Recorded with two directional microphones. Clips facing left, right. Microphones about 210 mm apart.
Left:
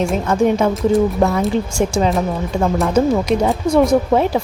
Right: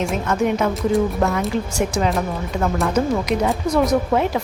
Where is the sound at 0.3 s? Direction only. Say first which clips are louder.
Left 4 dB; 30° left (ahead or behind).